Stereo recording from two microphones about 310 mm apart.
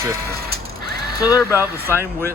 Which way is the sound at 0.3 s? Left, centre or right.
Right.